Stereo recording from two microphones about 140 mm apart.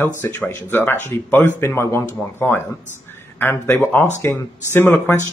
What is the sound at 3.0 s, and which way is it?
Speech, 15° left (ahead or behind).